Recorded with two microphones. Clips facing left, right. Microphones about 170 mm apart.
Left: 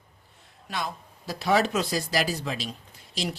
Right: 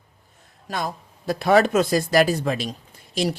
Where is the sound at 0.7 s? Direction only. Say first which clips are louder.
Right 5 dB; 45° right (ahead or behind).